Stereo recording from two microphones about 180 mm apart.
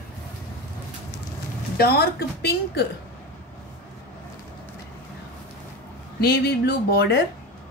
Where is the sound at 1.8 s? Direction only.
60° left (ahead or behind).